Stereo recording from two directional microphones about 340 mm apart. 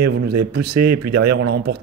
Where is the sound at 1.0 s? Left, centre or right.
Right.